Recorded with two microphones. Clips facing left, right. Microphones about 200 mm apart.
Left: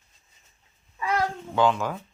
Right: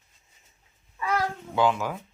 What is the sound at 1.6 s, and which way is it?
Speech, 10° right (ahead or behind).